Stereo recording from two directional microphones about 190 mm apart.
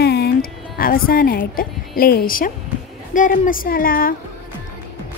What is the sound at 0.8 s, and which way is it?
Speech, 50° left (ahead or behind).